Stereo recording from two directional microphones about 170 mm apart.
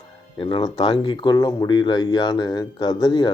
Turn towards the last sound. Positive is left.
turn(degrees=25)  # may be behind; listen again after turning